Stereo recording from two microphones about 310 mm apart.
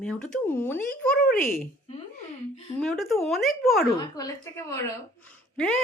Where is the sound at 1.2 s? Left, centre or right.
Left.